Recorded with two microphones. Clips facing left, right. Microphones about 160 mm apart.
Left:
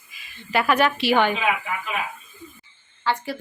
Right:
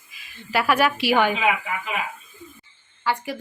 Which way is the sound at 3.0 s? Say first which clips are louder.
Even; 10° right (ahead or behind).